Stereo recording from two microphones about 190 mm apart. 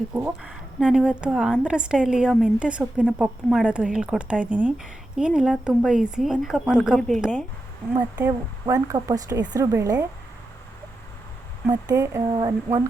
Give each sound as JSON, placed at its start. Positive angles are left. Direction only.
{"t": 0.1, "sound": "a woman's voice", "side_deg": -5}
{"t": 7.9, "sound": "speech", "side_deg": -15}
{"t": 11.6, "sound": "speech", "side_deg": -15}